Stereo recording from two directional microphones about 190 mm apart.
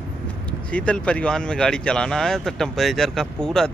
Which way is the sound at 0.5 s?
5° left (ahead or behind).